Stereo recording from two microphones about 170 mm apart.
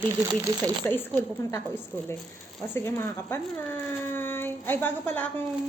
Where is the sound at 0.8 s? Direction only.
10° left (ahead or behind).